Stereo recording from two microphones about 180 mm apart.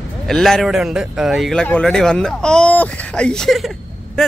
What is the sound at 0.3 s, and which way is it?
A man's voice, 5° left (ahead or behind).